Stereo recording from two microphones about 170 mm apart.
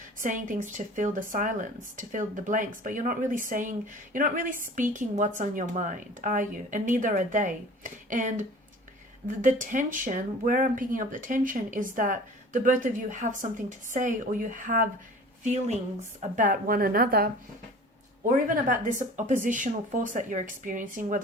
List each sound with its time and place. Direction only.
0.2 s speech: 50° right (ahead or behind)
9.4 s speech: 50° right (ahead or behind)
16.3 s a woman's voice: 55° right (ahead or behind)